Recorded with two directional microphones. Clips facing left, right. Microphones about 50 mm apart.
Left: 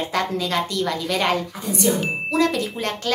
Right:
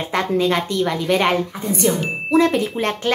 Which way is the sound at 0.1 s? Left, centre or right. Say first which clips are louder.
Right 7 dB; right.